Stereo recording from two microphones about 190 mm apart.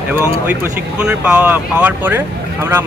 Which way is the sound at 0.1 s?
10° right (ahead or behind).